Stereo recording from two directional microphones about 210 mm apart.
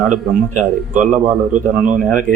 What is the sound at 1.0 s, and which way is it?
Speech, 35° right (ahead or behind).